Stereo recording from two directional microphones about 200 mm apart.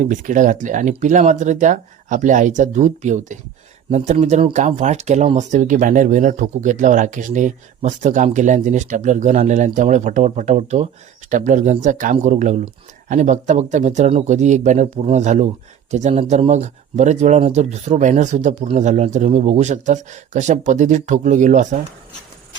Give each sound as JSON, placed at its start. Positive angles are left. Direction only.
{"t": 0.0, "sound": "speech", "side_deg": -40}